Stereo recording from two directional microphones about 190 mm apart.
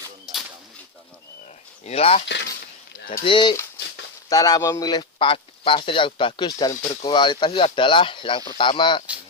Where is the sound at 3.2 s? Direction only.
25° left (ahead or behind).